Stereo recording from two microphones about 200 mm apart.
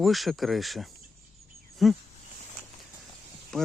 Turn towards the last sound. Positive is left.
turn(degrees=5)  # may be behind; listen again after turning